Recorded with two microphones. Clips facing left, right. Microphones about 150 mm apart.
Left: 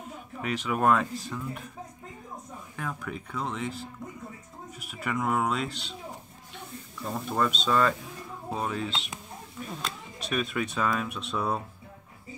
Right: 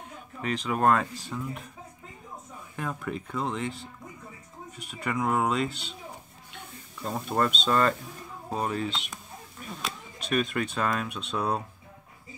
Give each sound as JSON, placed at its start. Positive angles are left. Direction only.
{"t": 0.4, "sound": "speech", "side_deg": 5}
{"t": 2.7, "sound": "speech", "side_deg": 0}
{"t": 7.0, "sound": "speech", "side_deg": -20}
{"t": 7.3, "sound": "speech", "side_deg": 0}